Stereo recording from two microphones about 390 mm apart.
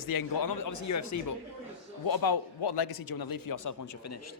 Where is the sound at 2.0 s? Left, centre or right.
Left.